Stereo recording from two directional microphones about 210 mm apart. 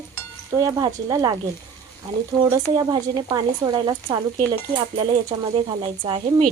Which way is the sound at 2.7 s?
20° right (ahead or behind).